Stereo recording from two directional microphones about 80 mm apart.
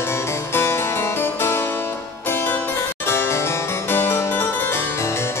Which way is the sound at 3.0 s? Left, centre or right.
Left.